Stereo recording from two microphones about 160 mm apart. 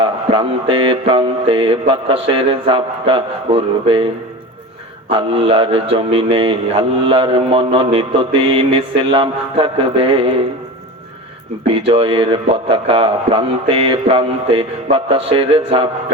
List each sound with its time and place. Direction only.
0.0 s a man's voice: 35° right (ahead or behind)
11.7 s a man's voice: 35° right (ahead or behind)